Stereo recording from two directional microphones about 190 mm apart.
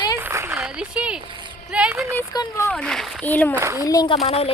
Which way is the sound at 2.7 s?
5° left (ahead or behind).